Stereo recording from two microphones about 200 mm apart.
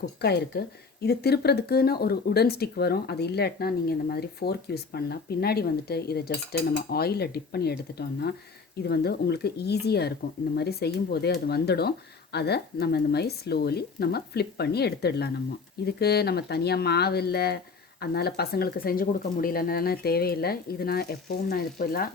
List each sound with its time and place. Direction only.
0.2 s speech: 55° left (ahead or behind)